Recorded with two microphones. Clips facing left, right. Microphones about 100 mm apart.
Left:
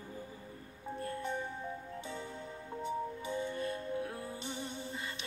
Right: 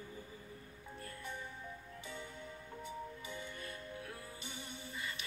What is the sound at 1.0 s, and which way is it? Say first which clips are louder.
Music: left 10 dB; 30° left (ahead or behind).